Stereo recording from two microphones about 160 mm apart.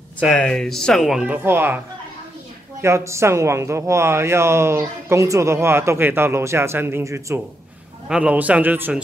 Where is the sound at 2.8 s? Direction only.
15° right (ahead or behind).